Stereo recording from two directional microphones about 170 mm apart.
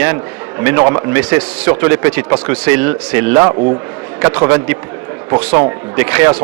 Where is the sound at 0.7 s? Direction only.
15° right (ahead or behind).